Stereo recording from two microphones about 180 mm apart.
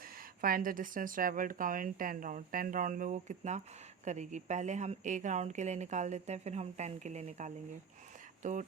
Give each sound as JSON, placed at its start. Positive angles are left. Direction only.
{"t": 0.4, "sound": "a woman's voice", "side_deg": -50}